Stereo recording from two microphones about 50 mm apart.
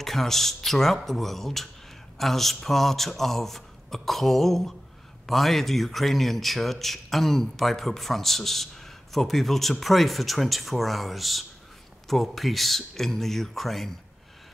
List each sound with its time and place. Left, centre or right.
0.0 s a man's voice: centre